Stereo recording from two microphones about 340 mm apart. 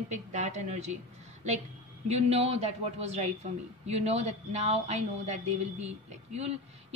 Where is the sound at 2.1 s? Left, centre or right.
Centre.